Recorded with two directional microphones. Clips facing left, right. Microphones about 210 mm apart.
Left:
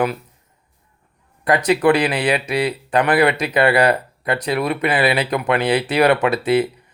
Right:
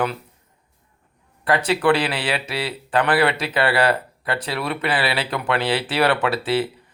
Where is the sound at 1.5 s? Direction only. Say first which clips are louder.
Left 3 dB; 10° left (ahead or behind).